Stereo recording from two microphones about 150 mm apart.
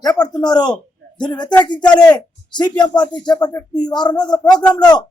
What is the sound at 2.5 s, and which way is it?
Speech, 30° left (ahead or behind).